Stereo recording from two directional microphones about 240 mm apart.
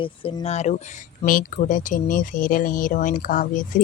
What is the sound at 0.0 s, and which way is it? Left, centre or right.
Speech, left.